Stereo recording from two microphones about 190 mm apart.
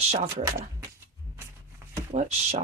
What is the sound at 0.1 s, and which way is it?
Speech, 35° right (ahead or behind).